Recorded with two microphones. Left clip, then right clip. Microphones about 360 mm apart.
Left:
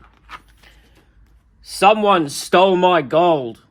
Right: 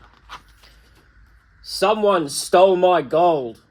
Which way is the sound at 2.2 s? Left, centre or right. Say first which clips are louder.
Left 2 dB; left.